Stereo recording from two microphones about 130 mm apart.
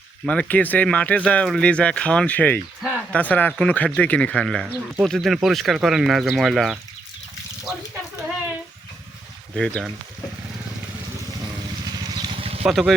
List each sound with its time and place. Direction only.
0.3 s speech: 10° left (ahead or behind)
9.6 s speech: 5° left (ahead or behind)
11.9 s vehicle: 35° right (ahead or behind)
12.6 s speech: centre (ahead or behind)